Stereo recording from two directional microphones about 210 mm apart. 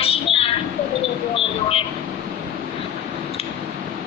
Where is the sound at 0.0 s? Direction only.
25° left (ahead or behind).